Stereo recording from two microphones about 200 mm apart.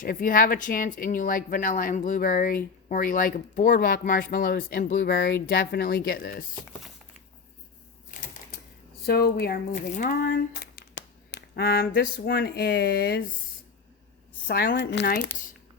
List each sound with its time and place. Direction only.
0.0 s speech: 45° left (ahead or behind)
9.0 s speech: 50° left (ahead or behind)
10.2 s a sound: 55° left (ahead or behind)
14.4 s speech: 55° left (ahead or behind)